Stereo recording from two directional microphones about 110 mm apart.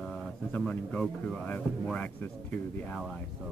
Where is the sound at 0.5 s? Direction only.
10° left (ahead or behind).